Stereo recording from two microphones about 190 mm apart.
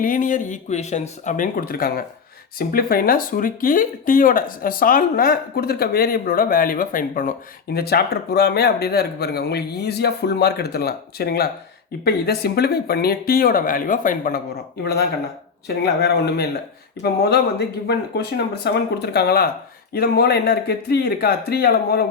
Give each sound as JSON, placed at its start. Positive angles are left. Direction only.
{"t": 0.0, "sound": "speech", "side_deg": 45}
{"t": 15.6, "sound": "speech", "side_deg": 60}